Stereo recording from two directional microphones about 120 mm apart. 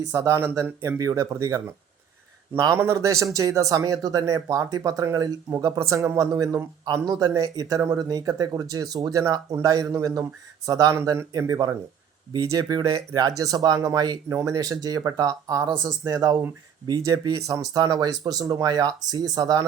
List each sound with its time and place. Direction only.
0.1 s speech: 25° right (ahead or behind)